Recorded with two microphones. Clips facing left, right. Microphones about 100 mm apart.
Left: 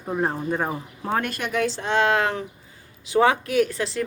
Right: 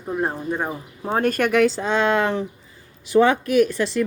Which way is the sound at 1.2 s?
50° right (ahead or behind).